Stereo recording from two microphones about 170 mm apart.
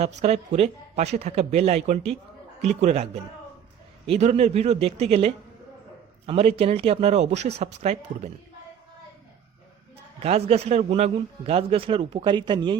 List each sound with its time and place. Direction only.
0.0 s a man's voice: 40° right (ahead or behind)
10.2 s a man's voice: 35° right (ahead or behind)